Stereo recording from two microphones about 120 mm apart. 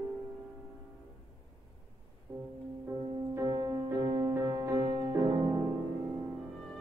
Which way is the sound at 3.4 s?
35° right (ahead or behind).